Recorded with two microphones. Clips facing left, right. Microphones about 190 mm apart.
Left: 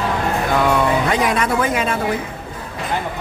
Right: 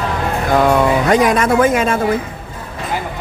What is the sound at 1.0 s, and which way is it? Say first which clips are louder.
Speech: right 5 dB; 45° right (ahead or behind).